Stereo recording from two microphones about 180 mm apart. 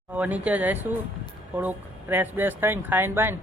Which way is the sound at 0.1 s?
10° right (ahead or behind).